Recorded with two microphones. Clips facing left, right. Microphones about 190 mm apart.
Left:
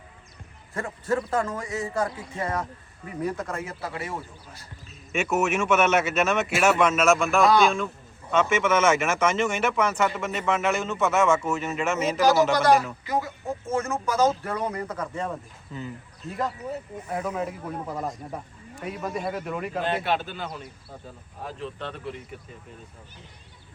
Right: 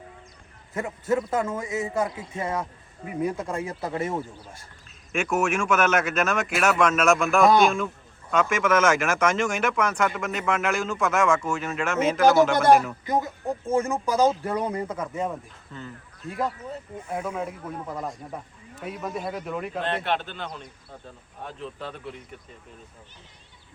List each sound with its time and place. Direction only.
1.5 s speech: 20° right (ahead or behind)
5.1 s speech: 5° left (ahead or behind)
13.1 s speech: 20° right (ahead or behind)
17.2 s speech: centre (ahead or behind)